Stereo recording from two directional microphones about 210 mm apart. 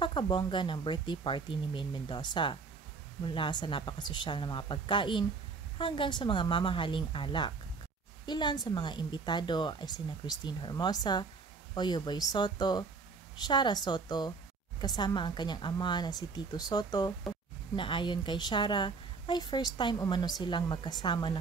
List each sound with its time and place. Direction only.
0.0 s a woman's voice: 25° left (ahead or behind)